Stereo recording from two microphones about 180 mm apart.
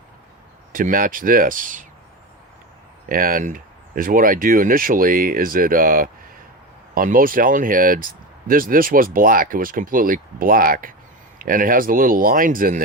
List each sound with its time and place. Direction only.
0.7 s speech: 50° right (ahead or behind)
3.1 s speech: 50° right (ahead or behind)